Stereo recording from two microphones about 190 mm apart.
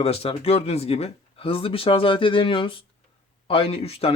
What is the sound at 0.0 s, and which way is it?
A man's voice, 30° left (ahead or behind).